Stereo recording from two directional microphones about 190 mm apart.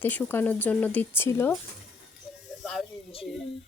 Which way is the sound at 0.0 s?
10° left (ahead or behind).